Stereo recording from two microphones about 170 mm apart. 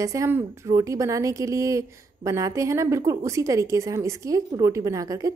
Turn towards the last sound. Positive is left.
turn(degrees=-20)  # may be behind; listen again after turning